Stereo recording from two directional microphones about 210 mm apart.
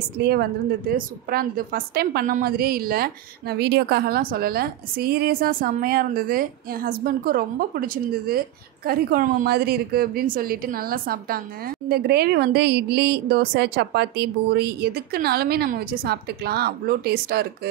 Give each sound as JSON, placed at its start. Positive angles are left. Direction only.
{"t": 0.2, "sound": "a woman's voice", "side_deg": -50}